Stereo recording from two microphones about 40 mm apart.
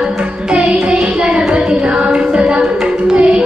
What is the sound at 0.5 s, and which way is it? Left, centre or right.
Music, right.